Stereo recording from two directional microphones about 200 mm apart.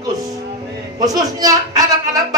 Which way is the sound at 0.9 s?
20° right (ahead or behind).